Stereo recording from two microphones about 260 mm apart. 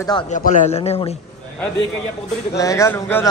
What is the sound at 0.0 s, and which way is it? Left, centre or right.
Speech, centre.